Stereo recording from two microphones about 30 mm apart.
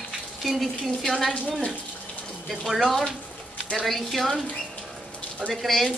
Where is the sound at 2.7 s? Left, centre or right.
Centre.